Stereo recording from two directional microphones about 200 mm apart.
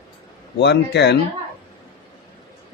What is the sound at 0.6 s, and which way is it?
Speech, 55° left (ahead or behind).